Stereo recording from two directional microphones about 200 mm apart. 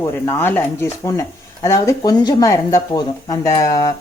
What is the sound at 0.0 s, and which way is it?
Speech, 15° left (ahead or behind).